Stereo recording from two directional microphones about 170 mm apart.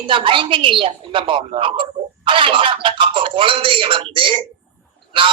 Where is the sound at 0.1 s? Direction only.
30° right (ahead or behind).